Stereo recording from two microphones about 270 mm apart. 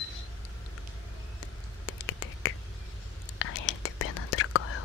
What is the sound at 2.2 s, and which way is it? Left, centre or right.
Finger snapping, left.